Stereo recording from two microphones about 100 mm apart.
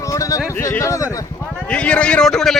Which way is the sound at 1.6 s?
10° left (ahead or behind).